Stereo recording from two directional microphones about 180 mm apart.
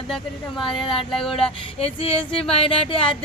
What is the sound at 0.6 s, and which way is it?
Speech, 25° left (ahead or behind).